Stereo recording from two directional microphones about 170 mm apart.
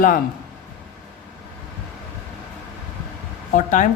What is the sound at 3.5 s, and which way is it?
Speech, 50° left (ahead or behind).